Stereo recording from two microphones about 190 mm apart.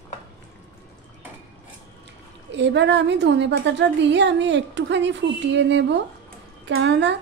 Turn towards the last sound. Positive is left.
turn(degrees=-65)  # may be behind; listen again after turning